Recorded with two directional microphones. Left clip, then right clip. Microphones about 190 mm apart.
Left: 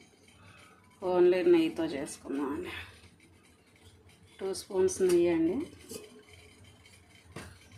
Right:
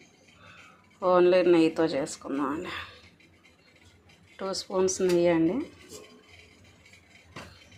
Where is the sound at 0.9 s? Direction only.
10° right (ahead or behind).